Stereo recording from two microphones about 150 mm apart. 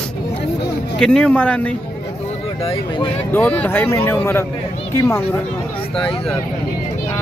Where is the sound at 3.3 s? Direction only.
10° left (ahead or behind).